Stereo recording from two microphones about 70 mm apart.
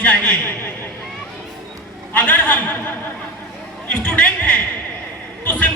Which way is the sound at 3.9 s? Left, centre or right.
Centre.